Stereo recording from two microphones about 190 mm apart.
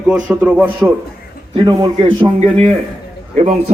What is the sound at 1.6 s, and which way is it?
A man's voice, 20° right (ahead or behind).